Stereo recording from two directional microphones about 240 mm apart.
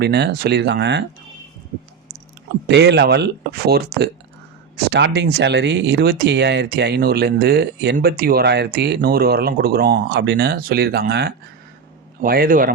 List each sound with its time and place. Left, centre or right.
0.0 s speech: right
2.6 s speech: right